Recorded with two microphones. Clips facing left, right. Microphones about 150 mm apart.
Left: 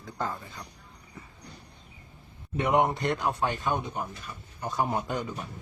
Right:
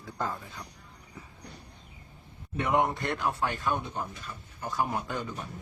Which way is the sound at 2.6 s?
20° left (ahead or behind).